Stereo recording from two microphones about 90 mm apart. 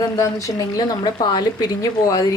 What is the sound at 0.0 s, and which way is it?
A woman's voice, 35° left (ahead or behind).